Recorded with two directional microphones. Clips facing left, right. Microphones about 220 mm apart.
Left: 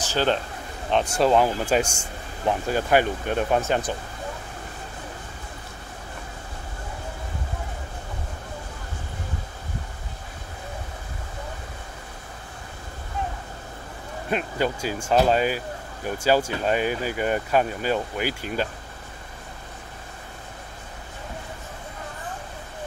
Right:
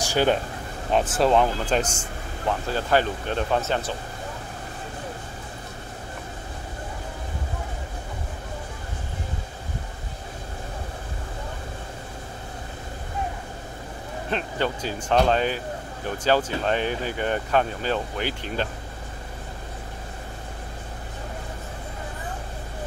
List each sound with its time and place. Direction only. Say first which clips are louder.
0.0 s speech: right 2 dB; 10° right (ahead or behind); by 3.9 s 15° left (ahead or behind)
14.3 s speech: left 2 dB; 10° left (ahead or behind)